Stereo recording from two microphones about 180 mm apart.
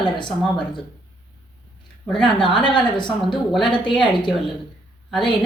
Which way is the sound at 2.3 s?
25° left (ahead or behind).